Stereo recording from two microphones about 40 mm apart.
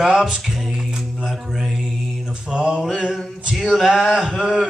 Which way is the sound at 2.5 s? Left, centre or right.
Right.